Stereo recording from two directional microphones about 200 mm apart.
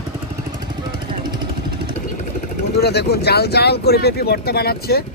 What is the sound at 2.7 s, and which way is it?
Speech, 55° left (ahead or behind).